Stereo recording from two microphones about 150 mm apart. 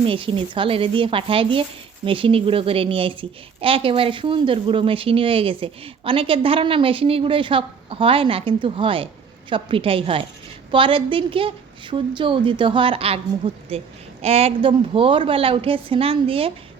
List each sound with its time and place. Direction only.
0.0 s a woman's voice: 35° right (ahead or behind)